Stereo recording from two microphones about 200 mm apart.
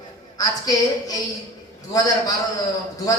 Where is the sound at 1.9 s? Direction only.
15° left (ahead or behind).